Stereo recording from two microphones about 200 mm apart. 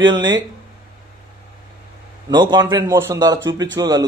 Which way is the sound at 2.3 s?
20° right (ahead or behind).